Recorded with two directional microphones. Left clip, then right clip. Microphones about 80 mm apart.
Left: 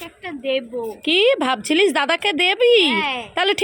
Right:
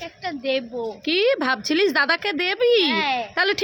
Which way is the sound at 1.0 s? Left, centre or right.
Centre.